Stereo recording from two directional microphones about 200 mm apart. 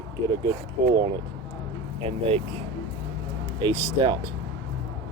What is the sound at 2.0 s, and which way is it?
Speech, 30° right (ahead or behind).